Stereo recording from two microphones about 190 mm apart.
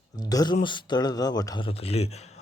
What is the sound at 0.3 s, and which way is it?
Speech, 20° left (ahead or behind).